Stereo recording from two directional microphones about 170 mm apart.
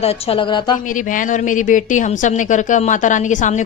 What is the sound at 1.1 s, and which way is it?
A woman's voice, 50° left (ahead or behind).